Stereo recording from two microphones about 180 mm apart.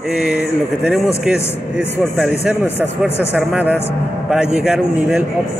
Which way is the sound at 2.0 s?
5° right (ahead or behind).